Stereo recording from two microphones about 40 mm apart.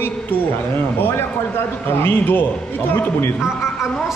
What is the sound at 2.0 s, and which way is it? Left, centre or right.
Speech, left.